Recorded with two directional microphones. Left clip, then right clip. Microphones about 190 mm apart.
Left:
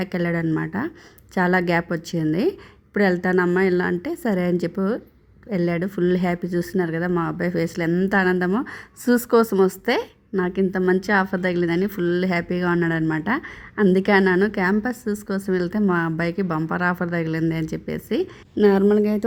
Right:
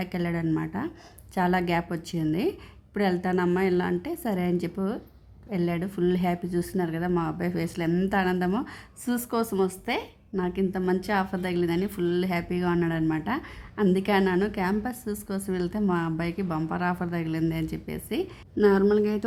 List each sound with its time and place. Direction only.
0.0 s speech: 15° left (ahead or behind)